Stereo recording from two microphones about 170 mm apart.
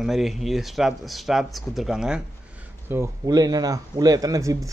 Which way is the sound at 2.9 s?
20° right (ahead or behind).